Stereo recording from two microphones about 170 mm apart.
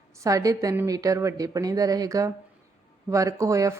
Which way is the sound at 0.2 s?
20° right (ahead or behind).